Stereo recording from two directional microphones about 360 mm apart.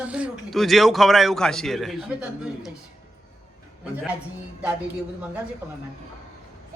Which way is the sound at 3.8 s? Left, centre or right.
Centre.